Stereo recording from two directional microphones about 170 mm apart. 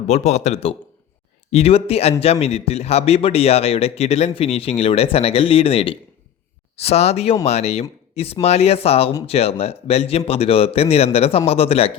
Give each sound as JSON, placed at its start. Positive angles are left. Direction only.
{"t": 0.1, "sound": "a man's voice", "side_deg": 40}